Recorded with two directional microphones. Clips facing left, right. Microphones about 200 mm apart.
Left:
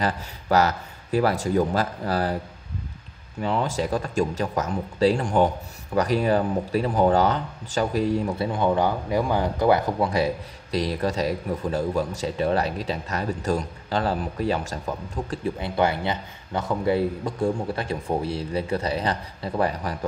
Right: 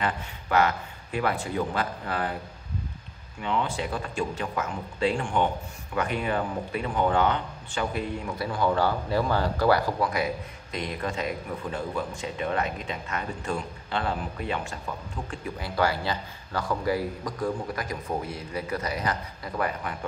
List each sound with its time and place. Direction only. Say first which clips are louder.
0.0 s speech: left 3 dB; 40° left (ahead or behind)
3.3 s speech: left 4 dB; 40° left (ahead or behind)
8.5 s speech: left 1 dB; 20° left (ahead or behind)
15.6 s speech: left 2 dB; 20° left (ahead or behind)